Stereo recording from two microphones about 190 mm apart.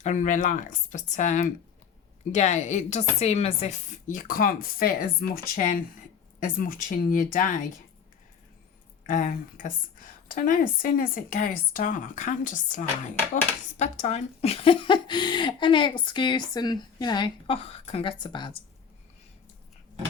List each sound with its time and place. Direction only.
0.0 s a woman's voice: 40° left (ahead or behind); by 5.4 s 55° left (ahead or behind)
6.4 s speech: 45° left (ahead or behind)
9.0 s speech: 45° left (ahead or behind); by 18.6 s 25° left (ahead or behind)